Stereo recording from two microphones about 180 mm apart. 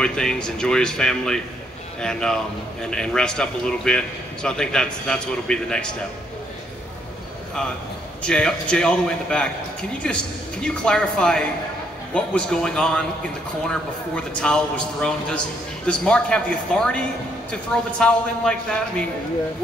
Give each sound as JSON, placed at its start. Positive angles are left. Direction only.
{"t": 0.0, "sound": "a man's voice", "side_deg": 5}
{"t": 8.2, "sound": "a man's voice", "side_deg": 5}
{"t": 14.1, "sound": "a man's voice", "side_deg": 5}